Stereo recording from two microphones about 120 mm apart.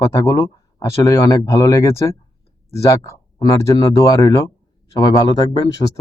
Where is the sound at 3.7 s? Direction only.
30° left (ahead or behind).